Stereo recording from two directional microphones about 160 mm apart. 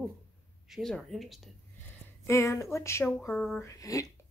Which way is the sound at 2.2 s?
20° left (ahead or behind).